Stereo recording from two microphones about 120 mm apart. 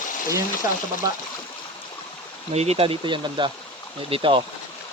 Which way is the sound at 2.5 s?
60° right (ahead or behind).